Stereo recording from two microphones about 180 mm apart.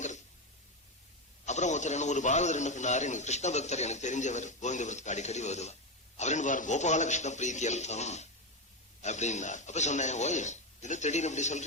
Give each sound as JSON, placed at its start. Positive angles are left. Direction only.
{"t": 1.5, "sound": "a man's voice", "side_deg": 40}